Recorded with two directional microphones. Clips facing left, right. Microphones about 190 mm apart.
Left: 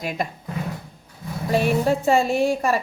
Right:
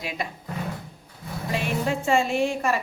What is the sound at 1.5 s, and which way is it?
A woman's voice, 40° left (ahead or behind).